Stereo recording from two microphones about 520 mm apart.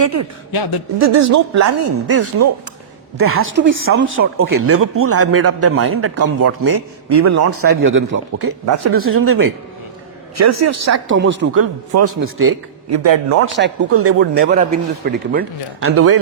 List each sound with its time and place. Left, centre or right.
0.0 s a man's voice: right